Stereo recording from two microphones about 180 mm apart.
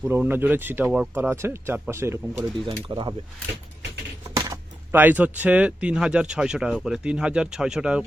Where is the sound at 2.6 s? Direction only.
25° right (ahead or behind).